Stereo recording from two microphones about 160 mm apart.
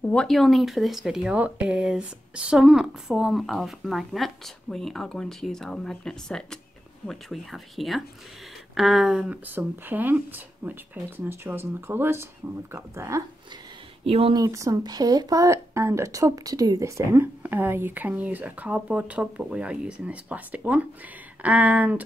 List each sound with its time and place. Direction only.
0.1 s speech: 5° left (ahead or behind); by 13.2 s 20° right (ahead or behind)
14.0 s speech: 35° right (ahead or behind)
14.3 s speech: 20° right (ahead or behind)